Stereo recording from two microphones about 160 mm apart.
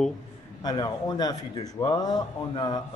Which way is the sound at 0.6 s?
25° left (ahead or behind).